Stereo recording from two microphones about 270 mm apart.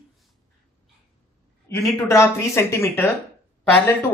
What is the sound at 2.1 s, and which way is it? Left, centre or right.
Speech, centre.